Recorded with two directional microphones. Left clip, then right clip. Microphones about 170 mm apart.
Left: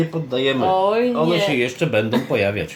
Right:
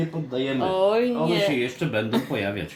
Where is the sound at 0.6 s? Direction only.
25° right (ahead or behind).